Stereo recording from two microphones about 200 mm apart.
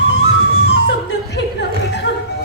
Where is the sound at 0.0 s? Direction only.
65° left (ahead or behind).